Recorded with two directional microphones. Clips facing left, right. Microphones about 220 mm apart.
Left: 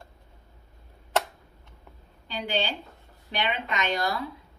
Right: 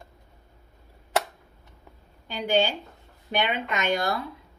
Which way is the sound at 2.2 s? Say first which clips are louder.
Right 6 dB; 50° right (ahead or behind).